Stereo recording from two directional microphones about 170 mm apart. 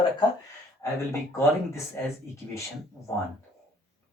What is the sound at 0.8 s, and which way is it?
Speech, 15° left (ahead or behind).